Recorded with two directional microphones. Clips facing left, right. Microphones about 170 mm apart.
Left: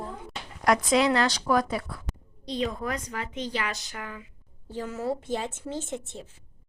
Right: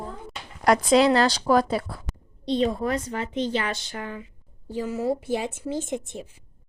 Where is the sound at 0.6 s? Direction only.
35° right (ahead or behind).